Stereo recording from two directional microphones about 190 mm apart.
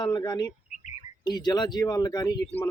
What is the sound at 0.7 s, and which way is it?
Bird, 40° left (ahead or behind).